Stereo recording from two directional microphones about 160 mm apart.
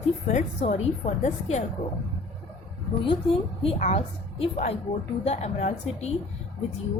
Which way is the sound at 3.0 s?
35° left (ahead or behind).